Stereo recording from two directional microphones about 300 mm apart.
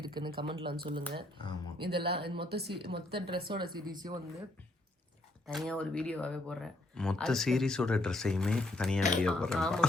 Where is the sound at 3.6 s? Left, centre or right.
Right.